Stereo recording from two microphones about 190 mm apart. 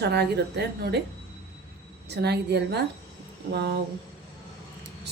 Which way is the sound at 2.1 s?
60° right (ahead or behind).